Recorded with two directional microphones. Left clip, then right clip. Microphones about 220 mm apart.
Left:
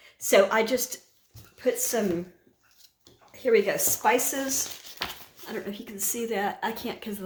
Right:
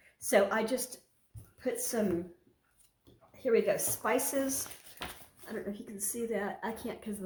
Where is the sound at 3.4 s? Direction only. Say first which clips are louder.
Left 6 dB; 35° left (ahead or behind).